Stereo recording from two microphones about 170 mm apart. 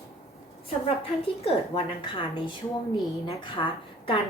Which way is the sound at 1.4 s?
35° left (ahead or behind).